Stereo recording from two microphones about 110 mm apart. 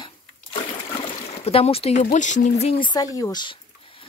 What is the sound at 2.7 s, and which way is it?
Speech, 45° left (ahead or behind).